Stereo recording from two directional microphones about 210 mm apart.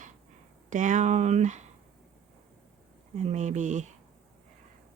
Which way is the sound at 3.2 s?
35° right (ahead or behind).